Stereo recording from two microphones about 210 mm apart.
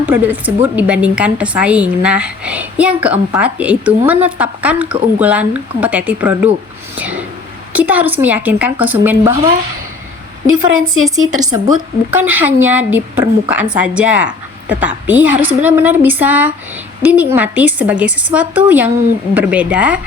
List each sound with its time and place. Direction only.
0.0 s a woman's voice: 10° right (ahead or behind)
6.9 s a sound: 5° right (ahead or behind)
7.7 s a woman's voice: 5° right (ahead or behind)
10.4 s a woman's voice: 75° right (ahead or behind)
11.3 s a woman's voice: 20° right (ahead or behind)